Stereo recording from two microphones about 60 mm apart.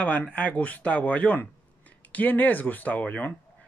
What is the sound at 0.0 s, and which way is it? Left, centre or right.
Speech, centre.